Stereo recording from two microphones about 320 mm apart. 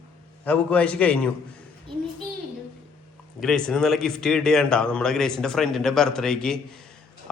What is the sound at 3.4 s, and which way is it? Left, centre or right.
Speech, centre.